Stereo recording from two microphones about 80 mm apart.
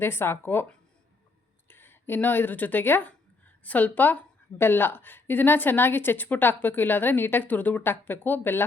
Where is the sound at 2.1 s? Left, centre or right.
Left.